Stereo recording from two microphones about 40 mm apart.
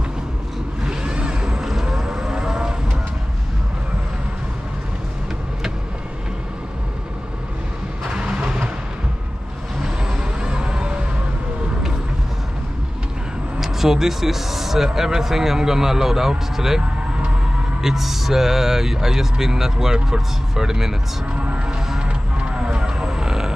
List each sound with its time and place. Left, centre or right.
0.8 s a sound: right
8.1 s vehicle: right
9.8 s music: centre
13.6 s speech: centre
17.8 s speech: centre
21.9 s music: right